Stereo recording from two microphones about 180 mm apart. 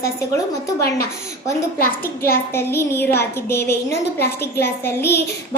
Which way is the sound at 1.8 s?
55° left (ahead or behind).